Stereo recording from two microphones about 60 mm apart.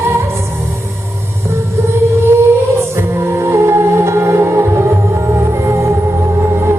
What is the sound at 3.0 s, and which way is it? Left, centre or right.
Music, right.